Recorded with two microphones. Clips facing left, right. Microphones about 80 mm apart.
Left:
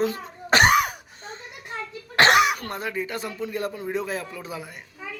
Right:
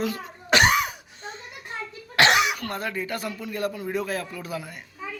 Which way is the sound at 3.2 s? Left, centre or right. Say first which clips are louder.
Left 1 dB; left.